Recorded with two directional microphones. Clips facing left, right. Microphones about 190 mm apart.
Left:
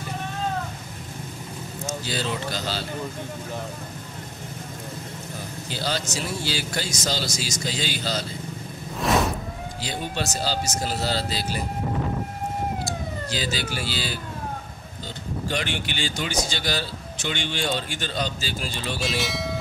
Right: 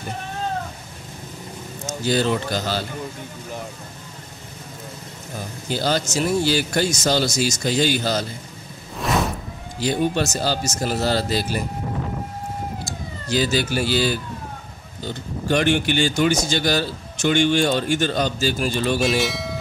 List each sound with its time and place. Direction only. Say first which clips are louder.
2.0 s a man's voice: right 10 dB; 50° right (ahead or behind)
5.7 s a man's voice: right 7 dB; 50° right (ahead or behind)
9.8 s a man's voice: right 10 dB; 50° right (ahead or behind)
13.3 s a man's voice: right 10 dB; 50° right (ahead or behind)
15.4 s a man's voice: right 11 dB; 50° right (ahead or behind)
18.9 s speech: right 6 dB; centre (ahead or behind)